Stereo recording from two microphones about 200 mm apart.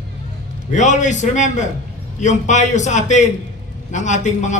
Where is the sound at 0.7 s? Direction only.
35° left (ahead or behind).